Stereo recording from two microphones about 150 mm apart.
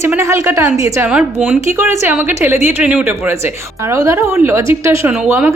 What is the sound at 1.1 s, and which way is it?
A woman's voice, 10° right (ahead or behind).